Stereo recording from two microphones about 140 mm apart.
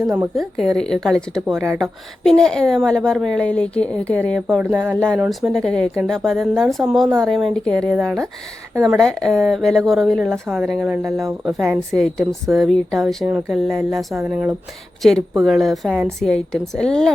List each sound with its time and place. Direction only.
0.1 s a woman's voice: 5° right (ahead or behind)
4.5 s speech: 10° right (ahead or behind)
4.9 s a woman's voice: 5° left (ahead or behind)
11.0 s speech: 20° right (ahead or behind)
11.9 s a woman's voice: 5° left (ahead or behind)
14.2 s speech: 10° right (ahead or behind)
15.4 s a woman's voice: centre (ahead or behind)